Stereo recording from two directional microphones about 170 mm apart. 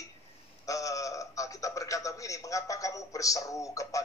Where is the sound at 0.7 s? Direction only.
20° left (ahead or behind).